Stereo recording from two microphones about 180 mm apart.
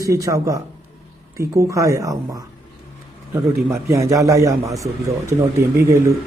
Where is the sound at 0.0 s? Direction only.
15° right (ahead or behind).